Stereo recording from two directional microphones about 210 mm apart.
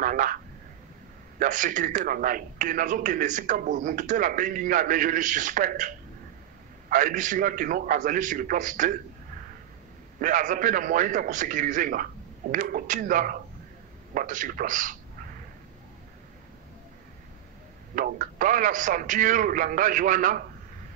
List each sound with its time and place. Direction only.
0.0 s speech: 40° right (ahead or behind)
1.4 s speech: 40° right (ahead or behind)
6.9 s speech: 40° right (ahead or behind)
10.2 s speech: 40° right (ahead or behind)
17.9 s speech: 40° right (ahead or behind)